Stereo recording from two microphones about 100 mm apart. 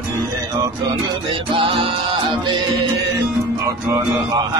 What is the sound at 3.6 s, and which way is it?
Music, 35° right (ahead or behind).